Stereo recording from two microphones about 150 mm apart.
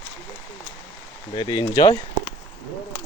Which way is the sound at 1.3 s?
30° left (ahead or behind).